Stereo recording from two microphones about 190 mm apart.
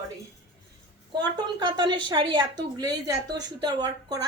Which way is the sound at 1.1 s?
20° right (ahead or behind).